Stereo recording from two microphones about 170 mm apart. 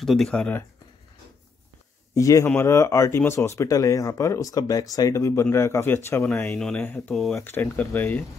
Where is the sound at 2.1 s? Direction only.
20° left (ahead or behind).